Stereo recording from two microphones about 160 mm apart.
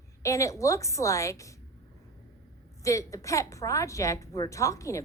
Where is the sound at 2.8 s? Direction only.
20° left (ahead or behind).